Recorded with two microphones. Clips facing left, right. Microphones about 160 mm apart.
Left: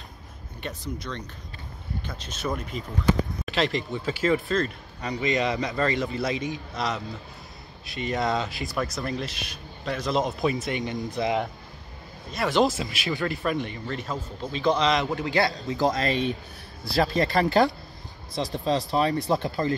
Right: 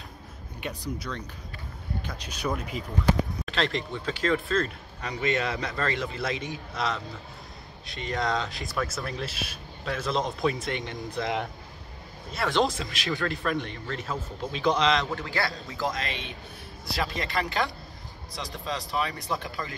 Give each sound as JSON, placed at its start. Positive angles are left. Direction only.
{"t": 0.6, "sound": "speech", "side_deg": -10}
{"t": 2.4, "sound": "speech", "side_deg": -5}
{"t": 3.4, "sound": "speech", "side_deg": 5}
{"t": 15.0, "sound": "a man's voice", "side_deg": 20}